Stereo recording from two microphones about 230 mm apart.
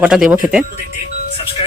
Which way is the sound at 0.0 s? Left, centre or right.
Centre.